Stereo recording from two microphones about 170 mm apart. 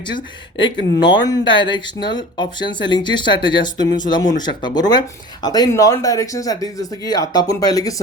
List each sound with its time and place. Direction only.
1.0 s speech: 25° left (ahead or behind)